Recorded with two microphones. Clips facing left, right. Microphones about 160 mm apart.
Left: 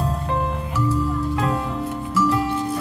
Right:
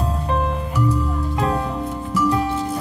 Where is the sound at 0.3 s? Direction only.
20° right (ahead or behind).